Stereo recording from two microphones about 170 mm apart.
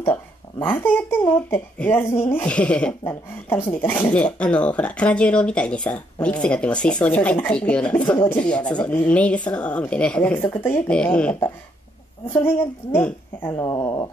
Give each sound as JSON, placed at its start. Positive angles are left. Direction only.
{"t": 0.6, "sound": "speech", "side_deg": 10}
{"t": 12.9, "sound": "speech", "side_deg": 10}